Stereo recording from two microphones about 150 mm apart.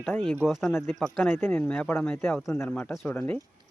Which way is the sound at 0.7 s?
15° left (ahead or behind).